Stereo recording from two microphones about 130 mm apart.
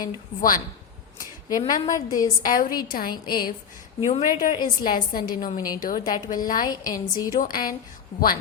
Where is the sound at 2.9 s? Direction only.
90° left.